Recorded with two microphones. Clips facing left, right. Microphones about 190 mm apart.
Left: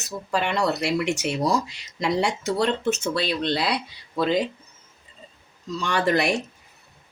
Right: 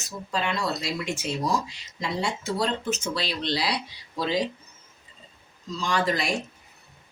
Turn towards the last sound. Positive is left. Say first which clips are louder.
# left 4 dB
turn(degrees=65)  # may be behind; listen again after turning